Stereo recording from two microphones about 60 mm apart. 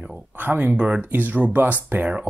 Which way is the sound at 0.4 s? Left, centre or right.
Right.